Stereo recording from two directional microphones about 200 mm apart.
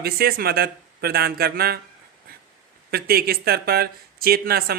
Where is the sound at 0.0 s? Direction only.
50° right (ahead or behind).